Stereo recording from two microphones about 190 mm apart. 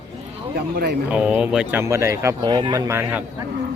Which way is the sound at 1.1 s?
5° right (ahead or behind).